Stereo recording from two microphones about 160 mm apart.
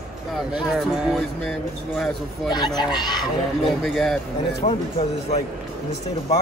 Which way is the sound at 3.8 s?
Centre (ahead or behind).